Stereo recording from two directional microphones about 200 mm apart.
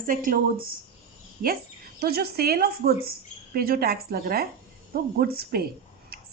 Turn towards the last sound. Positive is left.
turn(degrees=-50)  # may be behind; listen again after turning